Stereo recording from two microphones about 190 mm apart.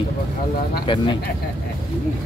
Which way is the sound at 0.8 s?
25° left (ahead or behind).